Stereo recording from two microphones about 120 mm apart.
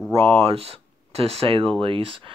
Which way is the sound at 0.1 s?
55° right (ahead or behind).